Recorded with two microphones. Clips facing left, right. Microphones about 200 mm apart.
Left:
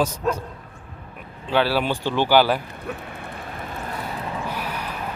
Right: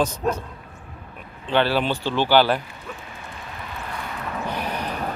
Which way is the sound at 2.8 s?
60° left (ahead or behind).